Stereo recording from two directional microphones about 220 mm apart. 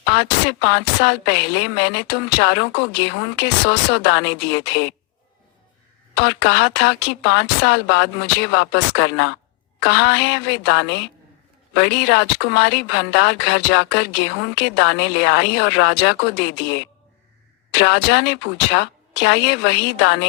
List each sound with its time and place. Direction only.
0.0 s a woman's voice: 55° left (ahead or behind)
6.1 s a woman's voice: 55° left (ahead or behind)
17.7 s a woman's voice: 50° left (ahead or behind)